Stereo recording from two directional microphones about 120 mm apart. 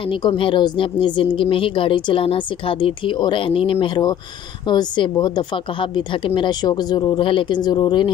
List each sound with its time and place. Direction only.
0.1 s a woman's voice: 45° left (ahead or behind)